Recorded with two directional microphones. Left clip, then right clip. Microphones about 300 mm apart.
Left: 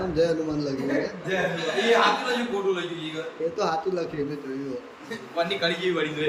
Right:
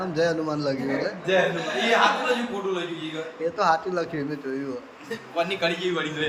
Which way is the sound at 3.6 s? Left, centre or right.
Centre.